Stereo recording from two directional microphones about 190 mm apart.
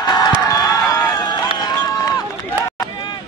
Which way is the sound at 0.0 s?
20° left (ahead or behind).